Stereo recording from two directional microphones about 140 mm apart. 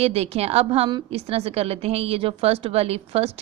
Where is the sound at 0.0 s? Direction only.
45° right (ahead or behind).